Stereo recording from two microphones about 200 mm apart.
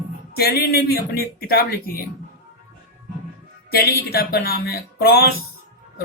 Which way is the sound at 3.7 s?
50° left (ahead or behind).